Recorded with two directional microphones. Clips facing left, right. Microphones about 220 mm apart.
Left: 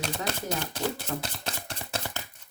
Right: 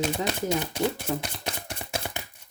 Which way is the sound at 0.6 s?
15° right (ahead or behind).